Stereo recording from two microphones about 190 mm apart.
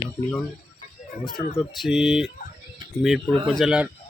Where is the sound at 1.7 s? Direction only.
Centre (ahead or behind).